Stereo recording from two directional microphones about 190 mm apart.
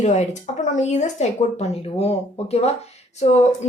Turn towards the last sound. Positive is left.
turn(degrees=35)  # may be behind; listen again after turning